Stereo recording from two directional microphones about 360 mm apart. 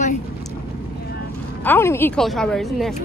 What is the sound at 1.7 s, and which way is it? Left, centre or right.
Speech, centre.